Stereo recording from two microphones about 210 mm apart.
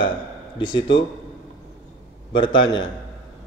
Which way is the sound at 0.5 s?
20° left (ahead or behind).